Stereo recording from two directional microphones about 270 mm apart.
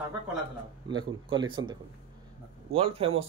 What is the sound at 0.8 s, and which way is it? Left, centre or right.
A man's voice, centre.